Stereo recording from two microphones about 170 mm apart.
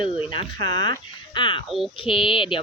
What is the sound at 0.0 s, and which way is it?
Speech, 30° left (ahead or behind).